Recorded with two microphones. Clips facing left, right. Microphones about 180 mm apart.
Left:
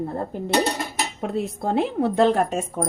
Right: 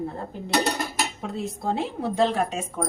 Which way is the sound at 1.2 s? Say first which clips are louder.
Left 5 dB; 60° left (ahead or behind).